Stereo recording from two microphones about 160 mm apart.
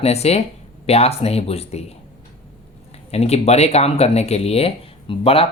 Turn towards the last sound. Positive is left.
turn(degrees=35)  # may be behind; listen again after turning